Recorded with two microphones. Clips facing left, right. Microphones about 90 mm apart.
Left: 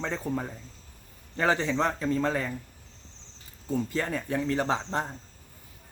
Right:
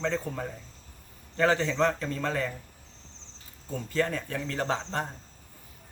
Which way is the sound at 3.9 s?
15° left (ahead or behind).